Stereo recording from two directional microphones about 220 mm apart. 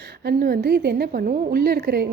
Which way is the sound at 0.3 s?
40° right (ahead or behind).